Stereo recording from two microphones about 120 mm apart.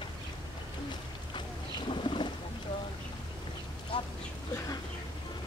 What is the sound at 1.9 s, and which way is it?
Boat, 45° left (ahead or behind).